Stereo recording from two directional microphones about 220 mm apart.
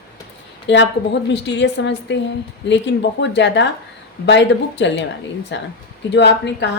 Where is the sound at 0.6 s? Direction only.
55° left (ahead or behind).